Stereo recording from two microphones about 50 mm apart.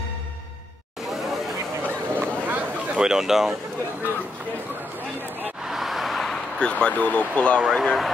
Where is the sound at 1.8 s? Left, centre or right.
Right.